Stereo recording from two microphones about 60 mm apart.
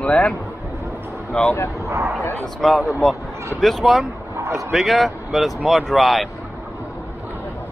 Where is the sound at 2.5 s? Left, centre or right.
Centre.